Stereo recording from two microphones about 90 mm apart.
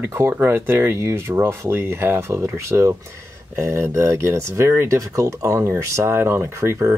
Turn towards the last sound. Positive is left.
turn(degrees=-30)  # may be behind; listen again after turning